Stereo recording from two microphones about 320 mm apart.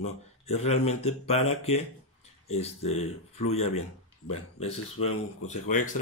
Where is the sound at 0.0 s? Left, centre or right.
Centre.